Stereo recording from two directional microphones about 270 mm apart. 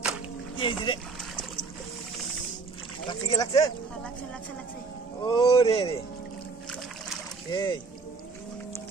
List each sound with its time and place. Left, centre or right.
0.6 s speech: centre
3.1 s speech: centre
5.2 s speech: centre
7.5 s speech: centre